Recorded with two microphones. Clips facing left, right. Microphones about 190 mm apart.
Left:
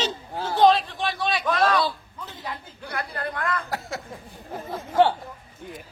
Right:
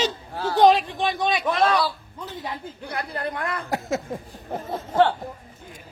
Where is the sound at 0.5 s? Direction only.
15° right (ahead or behind).